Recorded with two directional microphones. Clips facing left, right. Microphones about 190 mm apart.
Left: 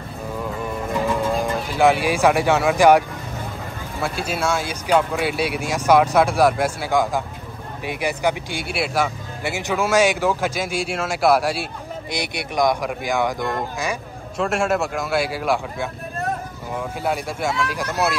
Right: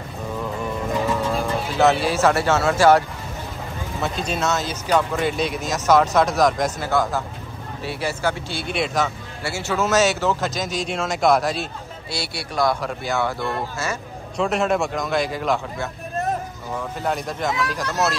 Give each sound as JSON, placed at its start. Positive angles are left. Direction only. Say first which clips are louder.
{"t": 1.4, "sound": "speech", "louder": "even", "side_deg": 10}
{"t": 4.0, "sound": "speech", "louder": "left 1 dB", "side_deg": 10}
{"t": 14.3, "sound": "speech", "louder": "even", "side_deg": 5}